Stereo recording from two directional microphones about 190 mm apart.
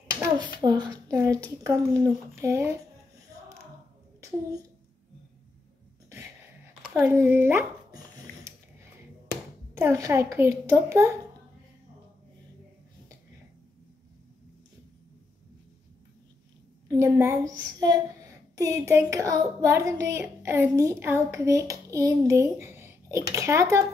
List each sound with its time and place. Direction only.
0.2 s a child's voice: 20° right (ahead or behind)
6.8 s speech: 5° right (ahead or behind)
9.8 s a child's voice: 15° right (ahead or behind)
16.8 s a child's voice: 15° right (ahead or behind)